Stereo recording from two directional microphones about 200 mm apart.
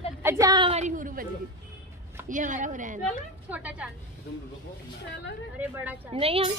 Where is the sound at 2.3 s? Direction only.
40° right (ahead or behind).